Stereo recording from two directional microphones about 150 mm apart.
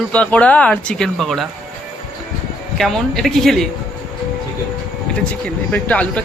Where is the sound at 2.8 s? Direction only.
Centre (ahead or behind).